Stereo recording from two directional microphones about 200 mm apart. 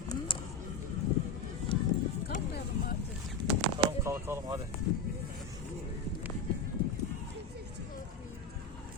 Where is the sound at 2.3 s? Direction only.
40° left (ahead or behind).